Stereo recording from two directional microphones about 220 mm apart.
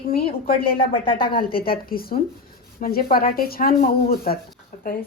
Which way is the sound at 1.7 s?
40° left (ahead or behind).